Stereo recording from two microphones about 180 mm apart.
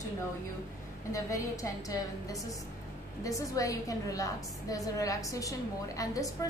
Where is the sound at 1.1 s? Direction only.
20° left (ahead or behind).